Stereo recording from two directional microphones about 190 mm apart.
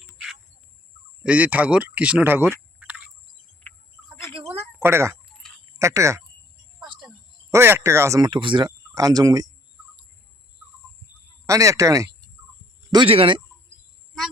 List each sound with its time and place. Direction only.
1.2 s speech: 5° right (ahead or behind)
3.6 s bird: 5° left (ahead or behind)
4.8 s speech: 15° right (ahead or behind)
7.5 s speech: 15° right (ahead or behind)
11.4 s speech: 15° right (ahead or behind)